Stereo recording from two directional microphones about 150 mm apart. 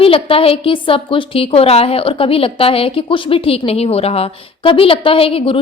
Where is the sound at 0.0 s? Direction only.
40° left (ahead or behind).